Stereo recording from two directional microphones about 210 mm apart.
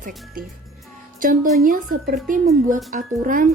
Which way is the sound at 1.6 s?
45° right (ahead or behind).